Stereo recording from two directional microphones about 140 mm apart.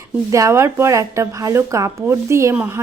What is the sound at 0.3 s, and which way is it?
Speech, 20° right (ahead or behind).